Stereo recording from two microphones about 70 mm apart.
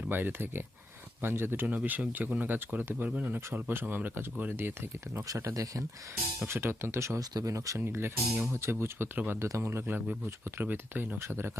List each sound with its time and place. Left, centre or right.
0.1 s speech: right
1.6 s speech: right
3.5 s speech: right
5.3 s speech: right
6.5 s speech: right
7.2 s speech: right
7.9 s speech: right
9.4 s speech: right